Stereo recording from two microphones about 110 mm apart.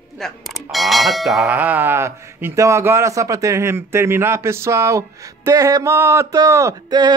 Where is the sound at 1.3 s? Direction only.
20° right (ahead or behind).